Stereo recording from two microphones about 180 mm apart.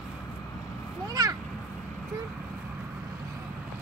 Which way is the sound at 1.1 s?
20° right (ahead or behind).